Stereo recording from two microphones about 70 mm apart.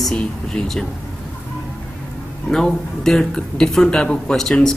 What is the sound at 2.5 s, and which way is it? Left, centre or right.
Speech, centre.